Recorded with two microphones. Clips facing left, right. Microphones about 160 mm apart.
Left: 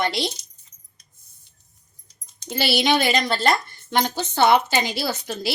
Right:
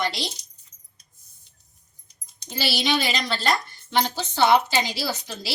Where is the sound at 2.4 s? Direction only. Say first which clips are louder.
Left 5 dB; 60° left (ahead or behind).